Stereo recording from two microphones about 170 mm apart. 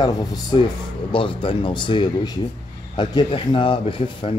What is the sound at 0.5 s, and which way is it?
Speech, 30° left (ahead or behind).